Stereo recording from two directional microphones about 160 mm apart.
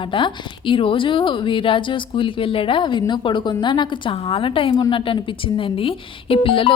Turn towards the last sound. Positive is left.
turn(degrees=35)  # may be behind; listen again after turning